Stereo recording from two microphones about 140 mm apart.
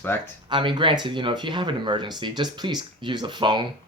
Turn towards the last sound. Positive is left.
turn(degrees=-35)  # may be behind; listen again after turning